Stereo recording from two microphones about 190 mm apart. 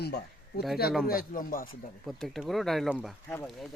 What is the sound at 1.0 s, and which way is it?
Speech, 50° left (ahead or behind).